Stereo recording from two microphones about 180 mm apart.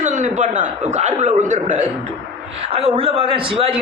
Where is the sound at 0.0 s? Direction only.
45° right (ahead or behind).